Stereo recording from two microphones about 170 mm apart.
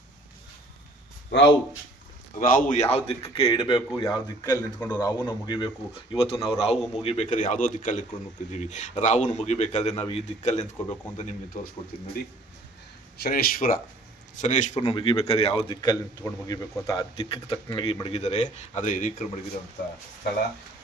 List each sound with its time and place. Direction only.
1.3 s speech: 90° left
2.4 s speech: 55° left (ahead or behind)
2.8 s a man's voice: 35° left (ahead or behind)
13.2 s speech: 60° left (ahead or behind)
14.4 s a man's voice: 45° left (ahead or behind)
14.8 s a man's voice: 30° left (ahead or behind)
17.2 s a man's voice: 35° left (ahead or behind); by 19.1 s 50° left (ahead or behind)